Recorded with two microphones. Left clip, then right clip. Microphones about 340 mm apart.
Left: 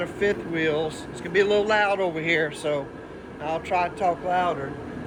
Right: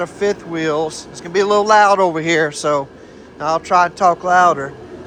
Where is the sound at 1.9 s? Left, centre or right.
Right.